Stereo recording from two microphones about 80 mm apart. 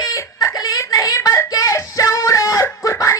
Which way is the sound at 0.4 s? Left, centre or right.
Left.